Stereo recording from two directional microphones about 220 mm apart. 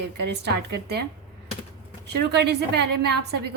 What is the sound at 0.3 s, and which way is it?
Speech, 50° right (ahead or behind).